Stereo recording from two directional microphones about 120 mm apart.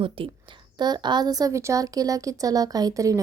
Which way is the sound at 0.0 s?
45° right (ahead or behind).